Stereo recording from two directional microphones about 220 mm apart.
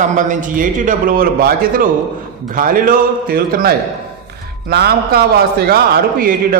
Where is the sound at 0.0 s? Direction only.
35° right (ahead or behind).